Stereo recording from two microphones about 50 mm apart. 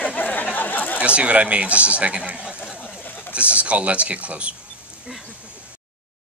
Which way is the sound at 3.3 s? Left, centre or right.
Right.